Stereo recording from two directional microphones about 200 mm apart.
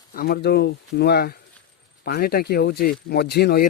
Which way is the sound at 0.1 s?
45° left (ahead or behind).